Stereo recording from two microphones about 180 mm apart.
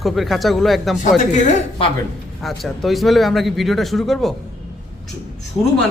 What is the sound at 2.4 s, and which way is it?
Speech, centre (ahead or behind).